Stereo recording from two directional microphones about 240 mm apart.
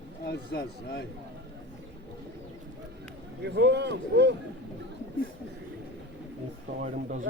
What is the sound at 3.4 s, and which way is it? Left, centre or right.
Speech, right.